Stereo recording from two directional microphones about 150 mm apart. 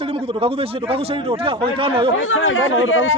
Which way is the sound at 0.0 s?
40° right (ahead or behind).